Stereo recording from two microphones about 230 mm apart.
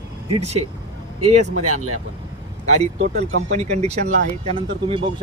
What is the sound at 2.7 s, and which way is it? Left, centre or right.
A man's voice, right.